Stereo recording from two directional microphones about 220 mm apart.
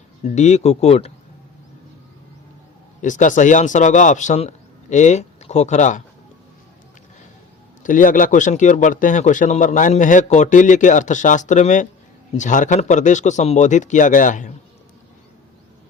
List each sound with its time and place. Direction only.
0.3 s speech: 30° left (ahead or behind)
3.0 s a man's voice: 35° left (ahead or behind)
7.9 s a man's voice: 35° left (ahead or behind)